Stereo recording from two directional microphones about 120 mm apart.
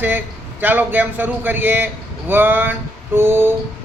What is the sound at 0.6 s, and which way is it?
A man's voice, 15° right (ahead or behind).